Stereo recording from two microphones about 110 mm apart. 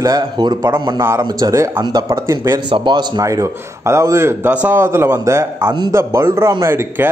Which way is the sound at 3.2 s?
30° right (ahead or behind).